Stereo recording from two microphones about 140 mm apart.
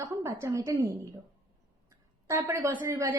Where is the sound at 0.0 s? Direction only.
20° right (ahead or behind).